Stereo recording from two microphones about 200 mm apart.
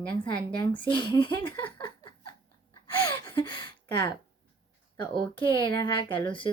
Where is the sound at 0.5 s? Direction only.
25° left (ahead or behind).